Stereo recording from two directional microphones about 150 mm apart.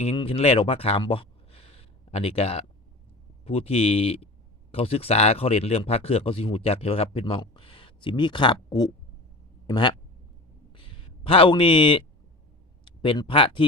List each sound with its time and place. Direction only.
0.0 s speech: 40° left (ahead or behind)
10.8 s a sound: 35° left (ahead or behind)
12.8 s speech: 35° left (ahead or behind)